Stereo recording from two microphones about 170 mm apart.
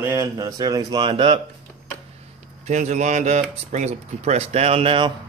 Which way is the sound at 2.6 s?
45° right (ahead or behind).